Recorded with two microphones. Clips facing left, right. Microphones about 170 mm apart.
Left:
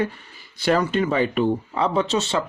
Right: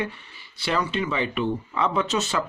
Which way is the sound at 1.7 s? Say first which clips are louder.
Left 3 dB; 35° left (ahead or behind).